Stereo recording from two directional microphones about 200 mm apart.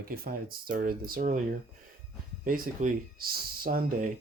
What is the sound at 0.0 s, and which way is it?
Speech, 45° right (ahead or behind).